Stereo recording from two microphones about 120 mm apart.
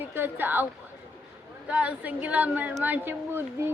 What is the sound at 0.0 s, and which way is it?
A woman's voice, 15° right (ahead or behind).